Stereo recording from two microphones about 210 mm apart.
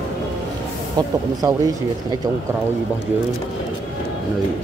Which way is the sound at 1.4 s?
15° right (ahead or behind).